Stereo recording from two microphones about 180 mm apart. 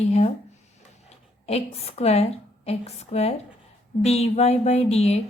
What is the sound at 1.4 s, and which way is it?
A woman's voice, 35° left (ahead or behind).